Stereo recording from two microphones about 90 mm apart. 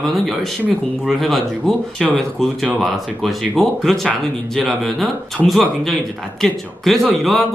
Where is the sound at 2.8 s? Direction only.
Centre (ahead or behind).